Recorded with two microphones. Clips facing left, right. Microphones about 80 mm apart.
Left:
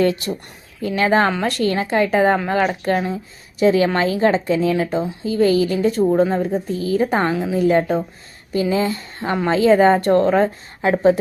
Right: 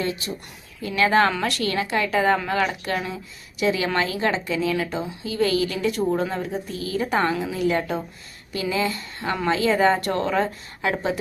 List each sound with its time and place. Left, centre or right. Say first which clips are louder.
0.0 s speech: left 9 dB; left
0.8 s a woman's voice: left 2 dB; left
6.1 s speech: left 7 dB; centre
6.7 s a woman's voice: left 4 dB; left